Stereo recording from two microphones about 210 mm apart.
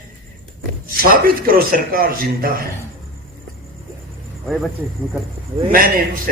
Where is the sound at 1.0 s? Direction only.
45° right (ahead or behind).